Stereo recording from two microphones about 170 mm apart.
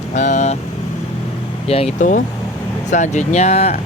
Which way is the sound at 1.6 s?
35° left (ahead or behind).